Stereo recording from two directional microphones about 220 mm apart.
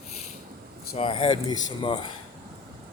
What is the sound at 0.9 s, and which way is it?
Speech, 25° left (ahead or behind).